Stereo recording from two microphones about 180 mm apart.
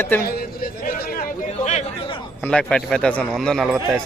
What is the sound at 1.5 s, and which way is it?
Speech, 40° left (ahead or behind).